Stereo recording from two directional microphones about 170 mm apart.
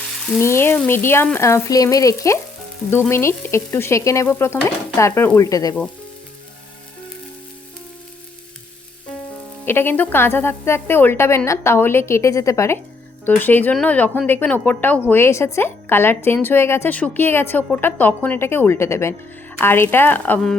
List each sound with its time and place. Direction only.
0.4 s a woman's voice: 15° left (ahead or behind)
9.6 s a woman's voice: 15° left (ahead or behind)